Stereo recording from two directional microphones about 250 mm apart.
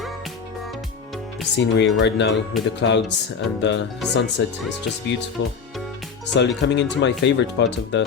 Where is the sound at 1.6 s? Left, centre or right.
Left.